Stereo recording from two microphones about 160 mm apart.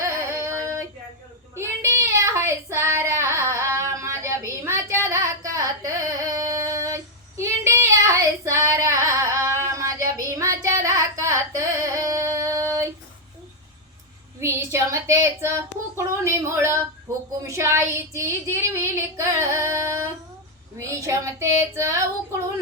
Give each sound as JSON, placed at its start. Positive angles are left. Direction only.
{"t": 0.0, "sound": "female singing", "side_deg": -15}
{"t": 1.5, "sound": "child singing", "side_deg": -15}
{"t": 14.3, "sound": "child singing", "side_deg": -15}